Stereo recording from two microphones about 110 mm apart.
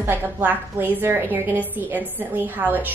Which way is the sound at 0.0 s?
20° right (ahead or behind).